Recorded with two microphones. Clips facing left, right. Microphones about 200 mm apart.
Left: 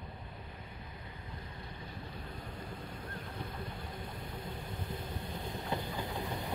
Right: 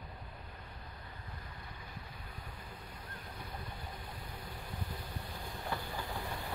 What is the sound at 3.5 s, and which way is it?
Vehicle, 25° left (ahead or behind).